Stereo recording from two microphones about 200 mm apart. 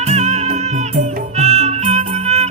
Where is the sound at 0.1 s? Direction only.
35° right (ahead or behind).